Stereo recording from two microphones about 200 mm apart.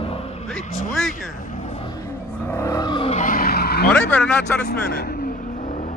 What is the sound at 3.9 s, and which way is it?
Vehicle, 5° left (ahead or behind).